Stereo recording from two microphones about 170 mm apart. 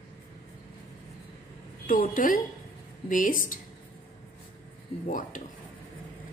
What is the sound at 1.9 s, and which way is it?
A woman's voice, 55° left (ahead or behind).